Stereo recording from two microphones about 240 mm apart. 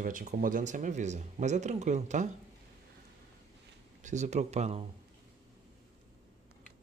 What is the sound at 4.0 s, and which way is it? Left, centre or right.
Speech, right.